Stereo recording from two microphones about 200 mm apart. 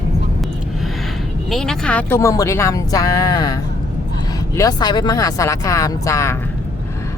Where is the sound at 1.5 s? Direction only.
5° left (ahead or behind).